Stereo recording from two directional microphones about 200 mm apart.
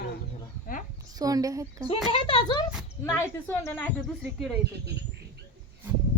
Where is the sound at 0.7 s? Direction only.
45° left (ahead or behind).